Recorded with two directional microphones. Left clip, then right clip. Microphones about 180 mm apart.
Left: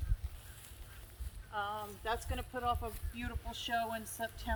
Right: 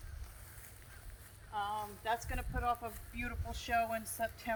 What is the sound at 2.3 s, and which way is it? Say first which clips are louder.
Speech: even; 30° right (ahead or behind).